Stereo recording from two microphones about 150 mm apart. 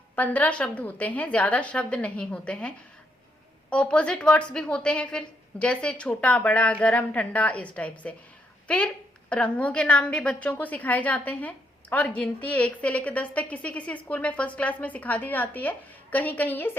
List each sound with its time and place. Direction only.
0.2 s a woman's voice: 10° left (ahead or behind)